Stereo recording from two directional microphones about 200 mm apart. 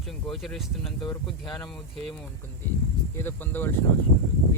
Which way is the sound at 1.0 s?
20° left (ahead or behind).